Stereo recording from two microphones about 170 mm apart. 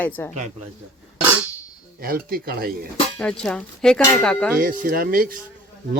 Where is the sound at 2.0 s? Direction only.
60° right (ahead or behind).